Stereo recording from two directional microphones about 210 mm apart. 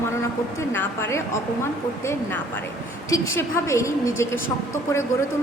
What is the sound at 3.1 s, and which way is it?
A woman's voice, 15° left (ahead or behind).